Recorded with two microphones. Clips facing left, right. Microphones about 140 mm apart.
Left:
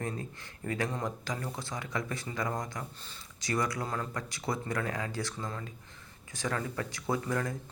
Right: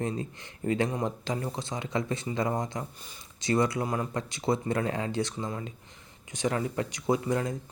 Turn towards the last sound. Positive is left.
turn(degrees=-20)  # may be behind; listen again after turning